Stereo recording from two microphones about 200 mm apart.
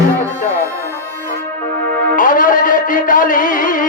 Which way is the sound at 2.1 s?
40° left (ahead or behind).